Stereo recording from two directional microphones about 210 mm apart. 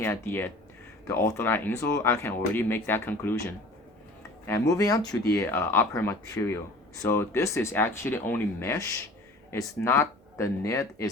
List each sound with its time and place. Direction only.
0.0 s speech: 10° left (ahead or behind)